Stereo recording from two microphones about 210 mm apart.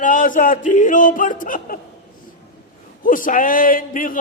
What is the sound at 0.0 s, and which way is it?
Speech, 40° left (ahead or behind).